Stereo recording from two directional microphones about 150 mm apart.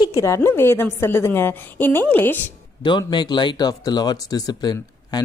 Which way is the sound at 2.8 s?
30° left (ahead or behind).